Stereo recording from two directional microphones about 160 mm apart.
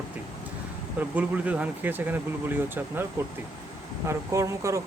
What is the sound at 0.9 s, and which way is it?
Speech, 10° right (ahead or behind).